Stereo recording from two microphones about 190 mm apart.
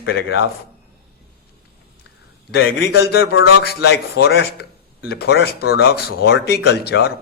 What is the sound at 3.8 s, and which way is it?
Speech, 60° left (ahead or behind).